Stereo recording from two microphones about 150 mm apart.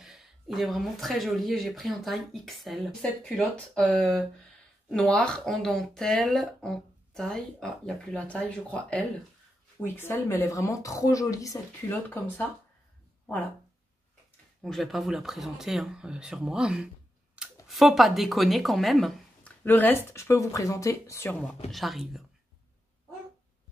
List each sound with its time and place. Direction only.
0.0 s a woman's voice: centre (ahead or behind); by 12.4 s 15° left (ahead or behind)
14.6 s a woman's voice: centre (ahead or behind)
19.6 s a woman's voice: 15° left (ahead or behind)